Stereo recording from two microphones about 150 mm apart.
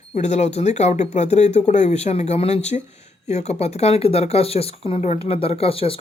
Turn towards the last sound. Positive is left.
turn(degrees=40)  # may be behind; listen again after turning